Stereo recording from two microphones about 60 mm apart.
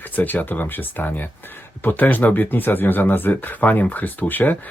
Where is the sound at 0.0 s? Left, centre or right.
Left.